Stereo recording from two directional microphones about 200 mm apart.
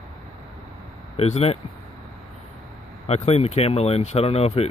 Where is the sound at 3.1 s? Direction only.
30° left (ahead or behind).